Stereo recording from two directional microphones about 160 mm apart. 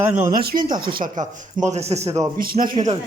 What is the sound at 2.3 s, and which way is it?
Speech, 65° right (ahead or behind).